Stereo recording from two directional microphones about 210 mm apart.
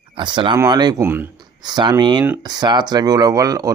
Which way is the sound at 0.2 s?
20° right (ahead or behind).